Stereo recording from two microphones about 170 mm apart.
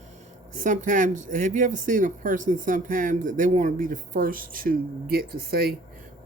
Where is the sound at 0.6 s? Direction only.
50° right (ahead or behind).